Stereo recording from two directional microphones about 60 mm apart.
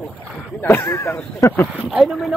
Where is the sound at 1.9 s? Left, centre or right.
Centre.